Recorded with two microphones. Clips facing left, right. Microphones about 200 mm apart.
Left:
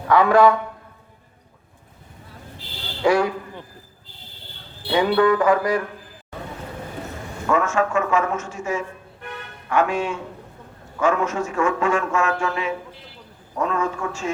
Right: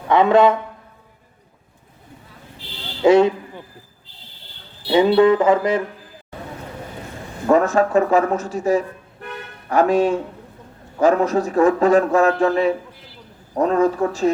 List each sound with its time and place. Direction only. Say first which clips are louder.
0.1 s music: right 1 dB; 20° right (ahead or behind)
3.0 s speech: right 6 dB; 25° right (ahead or behind)
4.9 s music: right 4 dB; 25° right (ahead or behind)
7.4 s a man's voice: right 5 dB; 35° right (ahead or behind)